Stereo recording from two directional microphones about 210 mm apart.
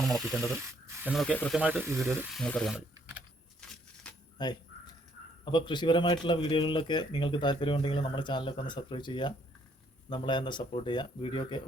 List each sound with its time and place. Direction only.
0.0 s speech: centre (ahead or behind)
5.5 s speech: 20° left (ahead or behind)